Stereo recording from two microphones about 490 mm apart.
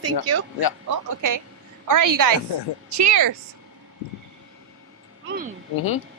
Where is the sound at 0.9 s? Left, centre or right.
Right.